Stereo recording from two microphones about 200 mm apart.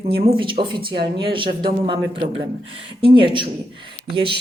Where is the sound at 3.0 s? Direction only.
25° right (ahead or behind).